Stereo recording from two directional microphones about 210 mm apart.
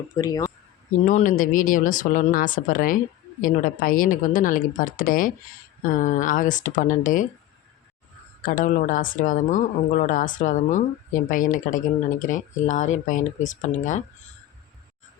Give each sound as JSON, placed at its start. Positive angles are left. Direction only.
{"t": 0.2, "sound": "speech", "side_deg": 15}
{"t": 1.0, "sound": "a woman's voice", "side_deg": 40}
{"t": 8.4, "sound": "a woman's voice", "side_deg": 40}